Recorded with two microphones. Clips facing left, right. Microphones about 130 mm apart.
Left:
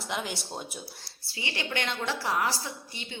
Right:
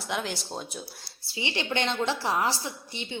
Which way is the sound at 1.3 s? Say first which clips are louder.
Right 4 dB; 25° right (ahead or behind).